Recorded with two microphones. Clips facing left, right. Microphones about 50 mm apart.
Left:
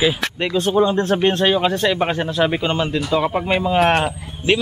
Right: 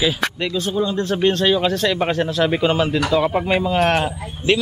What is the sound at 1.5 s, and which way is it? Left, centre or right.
Speech, centre.